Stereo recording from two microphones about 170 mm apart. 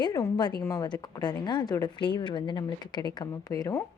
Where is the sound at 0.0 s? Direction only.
20° left (ahead or behind).